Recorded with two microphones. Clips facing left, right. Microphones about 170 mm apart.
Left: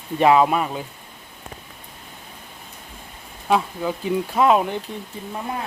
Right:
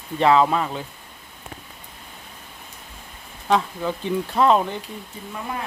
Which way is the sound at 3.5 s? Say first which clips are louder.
Left 1 dB; 10° left (ahead or behind).